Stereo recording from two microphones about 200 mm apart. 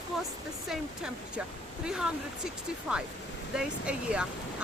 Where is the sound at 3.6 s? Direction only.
5° right (ahead or behind).